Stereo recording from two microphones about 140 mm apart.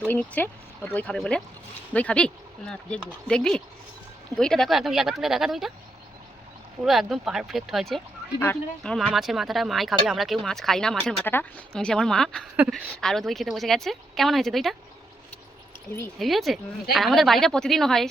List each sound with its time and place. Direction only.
0.1 s speech: 10° left (ahead or behind)
6.8 s speech: centre (ahead or behind)
12.5 s a woman's voice: 5° right (ahead or behind)
16.1 s speech: centre (ahead or behind)